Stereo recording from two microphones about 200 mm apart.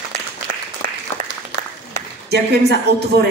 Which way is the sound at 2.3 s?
55° right (ahead or behind).